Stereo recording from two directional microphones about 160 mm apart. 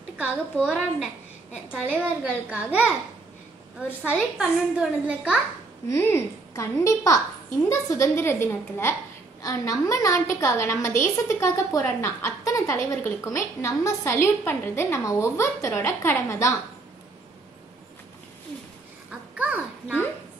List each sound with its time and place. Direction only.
0.6 s a woman's voice: centre (ahead or behind)
4.1 s a woman's voice: 5° right (ahead or behind)
5.9 s a woman's voice: 20° left (ahead or behind)
19.0 s babbling: 10° right (ahead or behind)